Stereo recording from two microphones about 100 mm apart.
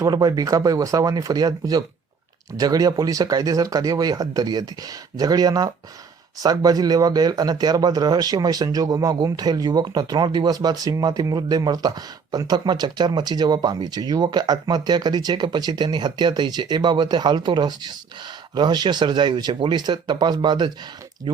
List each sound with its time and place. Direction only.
0.0 s speech: 35° right (ahead or behind)